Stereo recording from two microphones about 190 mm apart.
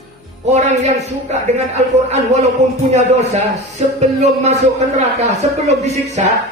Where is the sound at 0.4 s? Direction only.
35° right (ahead or behind).